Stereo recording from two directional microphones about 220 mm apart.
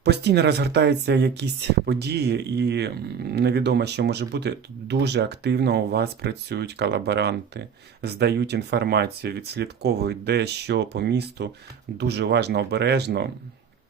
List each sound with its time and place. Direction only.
0.0 s speech: 50° right (ahead or behind)